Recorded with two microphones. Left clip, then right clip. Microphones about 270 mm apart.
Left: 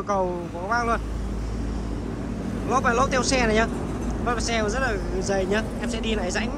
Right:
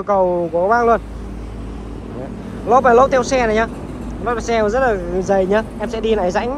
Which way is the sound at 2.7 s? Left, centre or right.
Centre.